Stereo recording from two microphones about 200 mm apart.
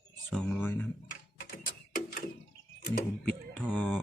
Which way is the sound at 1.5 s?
45° left (ahead or behind).